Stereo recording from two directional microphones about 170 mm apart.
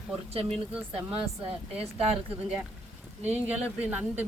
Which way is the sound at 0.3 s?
35° right (ahead or behind).